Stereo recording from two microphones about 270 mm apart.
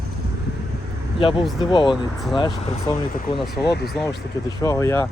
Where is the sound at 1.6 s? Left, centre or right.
Centre.